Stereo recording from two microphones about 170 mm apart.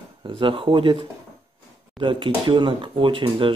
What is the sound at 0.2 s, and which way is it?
Speech, 30° right (ahead or behind).